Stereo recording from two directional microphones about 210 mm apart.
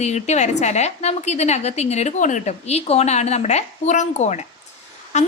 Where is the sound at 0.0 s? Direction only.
30° left (ahead or behind).